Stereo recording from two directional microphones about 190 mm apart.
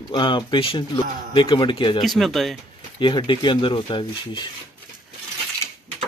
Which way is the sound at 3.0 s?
25° left (ahead or behind).